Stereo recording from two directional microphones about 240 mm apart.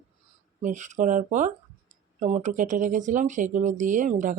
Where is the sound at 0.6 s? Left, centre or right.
Right.